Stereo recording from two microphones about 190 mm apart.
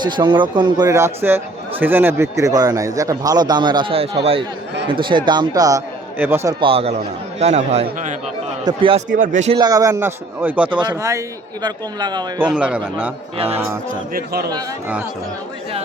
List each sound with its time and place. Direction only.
0.0 s a man's voice: 25° right (ahead or behind)
6.6 s a man's voice: 30° right (ahead or behind)
9.1 s a man's voice: 45° right (ahead or behind)
9.6 s a man's voice: 20° right (ahead or behind)
10.7 s speech: 25° right (ahead or behind)
12.4 s a man's voice: 5° right (ahead or behind)
13.3 s a man's voice: 30° right (ahead or behind)
14.1 s a man's voice: 50° right (ahead or behind)